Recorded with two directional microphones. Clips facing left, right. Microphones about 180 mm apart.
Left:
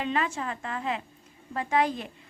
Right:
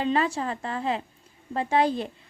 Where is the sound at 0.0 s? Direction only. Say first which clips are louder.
Right 4 dB; 35° right (ahead or behind).